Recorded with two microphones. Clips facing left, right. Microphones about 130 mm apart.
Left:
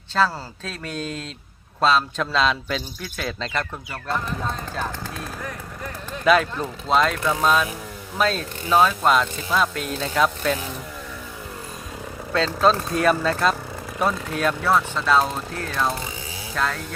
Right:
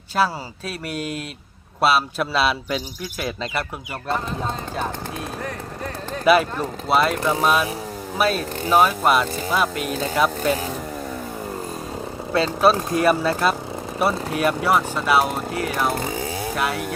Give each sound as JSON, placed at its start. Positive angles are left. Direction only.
{"t": 0.2, "sound": "speech", "side_deg": -10}
{"t": 6.2, "sound": "speech", "side_deg": -5}
{"t": 12.3, "sound": "speech", "side_deg": -10}